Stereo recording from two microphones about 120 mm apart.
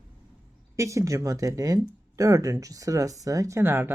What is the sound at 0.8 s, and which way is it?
Speech, 25° right (ahead or behind).